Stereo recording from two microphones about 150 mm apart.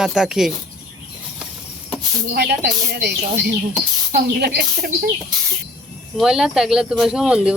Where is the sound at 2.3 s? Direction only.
90° right.